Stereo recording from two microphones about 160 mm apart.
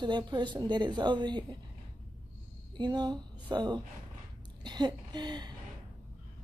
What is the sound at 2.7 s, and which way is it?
Speech, 25° right (ahead or behind).